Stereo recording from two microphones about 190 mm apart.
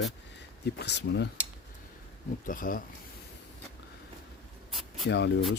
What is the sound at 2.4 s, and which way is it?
Speech, 45° left (ahead or behind).